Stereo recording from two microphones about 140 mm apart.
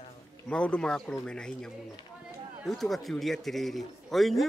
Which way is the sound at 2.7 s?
Centre (ahead or behind).